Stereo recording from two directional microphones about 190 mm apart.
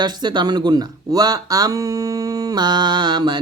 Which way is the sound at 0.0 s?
20° right (ahead or behind).